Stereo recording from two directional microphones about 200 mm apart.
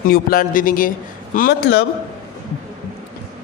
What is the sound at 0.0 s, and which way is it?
A man's voice, 45° left (ahead or behind).